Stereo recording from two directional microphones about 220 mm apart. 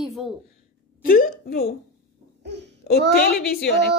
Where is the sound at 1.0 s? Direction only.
40° left (ahead or behind).